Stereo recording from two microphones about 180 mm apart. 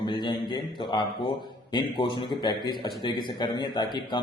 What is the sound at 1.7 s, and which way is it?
A man's voice, 25° left (ahead or behind).